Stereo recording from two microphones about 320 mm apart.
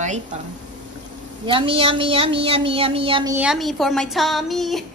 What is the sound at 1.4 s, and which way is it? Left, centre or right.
A woman's voice, centre.